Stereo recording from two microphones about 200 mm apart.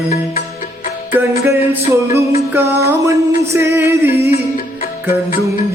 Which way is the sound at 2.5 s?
10° right (ahead or behind).